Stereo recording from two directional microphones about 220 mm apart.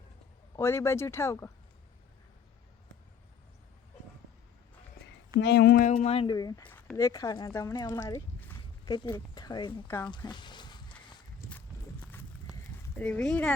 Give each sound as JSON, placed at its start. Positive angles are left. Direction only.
{"t": 0.5, "sound": "speech", "side_deg": 10}
{"t": 5.0, "sound": "a sound", "side_deg": 40}
{"t": 5.4, "sound": "speech", "side_deg": 50}
{"t": 9.8, "sound": "speech", "side_deg": 10}
{"t": 10.1, "sound": "walk", "side_deg": 20}
{"t": 12.8, "sound": "speech", "side_deg": 5}